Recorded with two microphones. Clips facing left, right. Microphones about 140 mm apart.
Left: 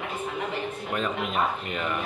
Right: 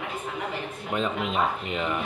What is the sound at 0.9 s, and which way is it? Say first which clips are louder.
Speech: right 3 dB; 25° right (ahead or behind).